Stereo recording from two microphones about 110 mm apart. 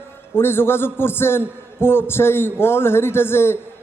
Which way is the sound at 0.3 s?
20° left (ahead or behind).